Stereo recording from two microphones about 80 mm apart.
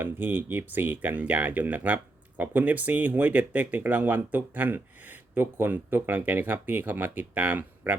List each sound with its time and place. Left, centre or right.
0.0 s speech: right